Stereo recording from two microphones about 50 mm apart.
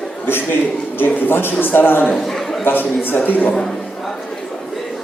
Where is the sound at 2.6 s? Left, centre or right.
Left.